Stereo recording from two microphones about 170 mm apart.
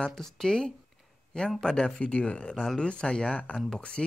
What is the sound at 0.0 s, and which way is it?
Speech, 5° left (ahead or behind).